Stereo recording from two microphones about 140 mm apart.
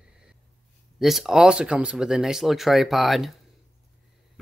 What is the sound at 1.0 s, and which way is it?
Speech, centre (ahead or behind).